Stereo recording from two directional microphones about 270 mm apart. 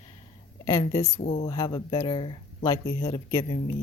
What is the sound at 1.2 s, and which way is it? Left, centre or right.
Speech, left.